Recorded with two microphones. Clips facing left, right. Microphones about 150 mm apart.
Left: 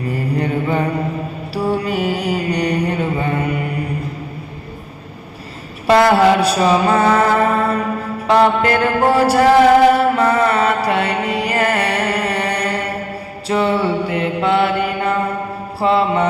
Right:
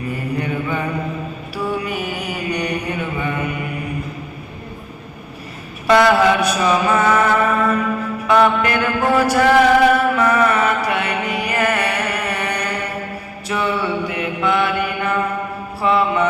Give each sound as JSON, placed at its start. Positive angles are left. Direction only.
{"t": 0.0, "sound": "mantra", "side_deg": 35}
{"t": 5.9, "sound": "mantra", "side_deg": 35}